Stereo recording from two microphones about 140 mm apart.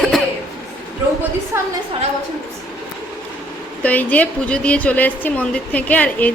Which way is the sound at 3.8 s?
10° left (ahead or behind).